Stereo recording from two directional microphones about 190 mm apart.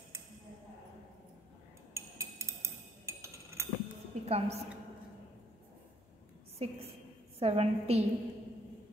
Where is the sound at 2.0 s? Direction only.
15° right (ahead or behind).